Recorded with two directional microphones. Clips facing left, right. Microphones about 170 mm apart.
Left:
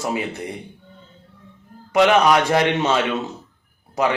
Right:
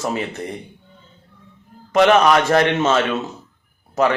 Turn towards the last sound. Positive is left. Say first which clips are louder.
# right 3 dB
turn(degrees=15)  # may be behind; listen again after turning